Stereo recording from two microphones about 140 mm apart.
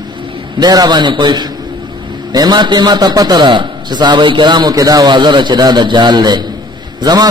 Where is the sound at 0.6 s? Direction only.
30° right (ahead or behind).